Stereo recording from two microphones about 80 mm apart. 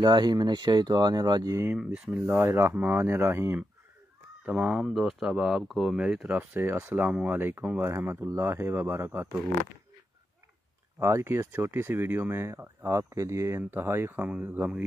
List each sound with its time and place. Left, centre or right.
0.0 s speech: right
1.8 s speech: centre; by 3.6 s right
4.5 s speech: centre
6.2 s speech: centre
11.0 s speech: right
14.2 s speech: right